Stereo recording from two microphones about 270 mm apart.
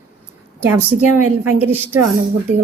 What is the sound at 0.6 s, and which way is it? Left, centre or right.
A woman's voice, centre.